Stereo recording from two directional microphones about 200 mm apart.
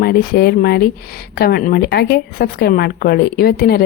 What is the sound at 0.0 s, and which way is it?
Speech, 50° left (ahead or behind).